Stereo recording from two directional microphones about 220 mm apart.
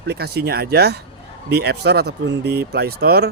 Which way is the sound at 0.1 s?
45° right (ahead or behind).